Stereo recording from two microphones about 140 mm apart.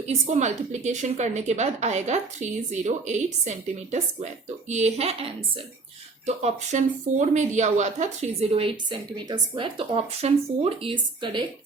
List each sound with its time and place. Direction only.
0.1 s a woman's voice: 55° right (ahead or behind)
4.7 s speech: 50° right (ahead or behind)